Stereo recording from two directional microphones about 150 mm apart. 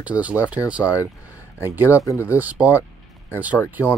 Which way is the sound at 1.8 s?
20° left (ahead or behind).